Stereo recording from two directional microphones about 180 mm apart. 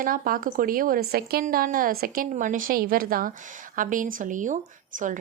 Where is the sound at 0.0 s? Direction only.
50° right (ahead or behind).